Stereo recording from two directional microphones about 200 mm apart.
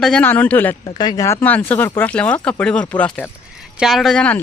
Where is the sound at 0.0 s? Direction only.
5° left (ahead or behind).